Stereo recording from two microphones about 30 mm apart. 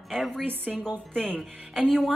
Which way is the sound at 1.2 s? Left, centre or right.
Right.